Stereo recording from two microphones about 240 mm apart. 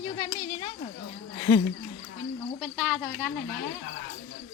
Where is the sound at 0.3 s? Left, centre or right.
Centre.